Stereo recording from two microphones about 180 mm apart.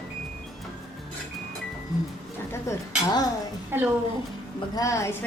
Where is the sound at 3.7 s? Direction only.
10° right (ahead or behind).